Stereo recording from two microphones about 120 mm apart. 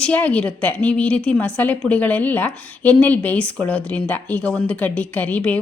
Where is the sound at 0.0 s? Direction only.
15° left (ahead or behind).